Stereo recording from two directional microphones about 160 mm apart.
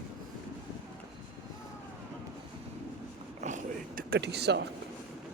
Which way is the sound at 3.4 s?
50° right (ahead or behind).